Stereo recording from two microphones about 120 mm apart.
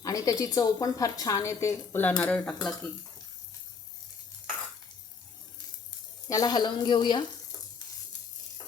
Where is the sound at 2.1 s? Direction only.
10° left (ahead or behind).